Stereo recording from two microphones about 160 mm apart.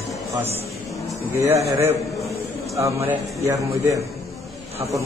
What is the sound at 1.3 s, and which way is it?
Speech, 15° right (ahead or behind).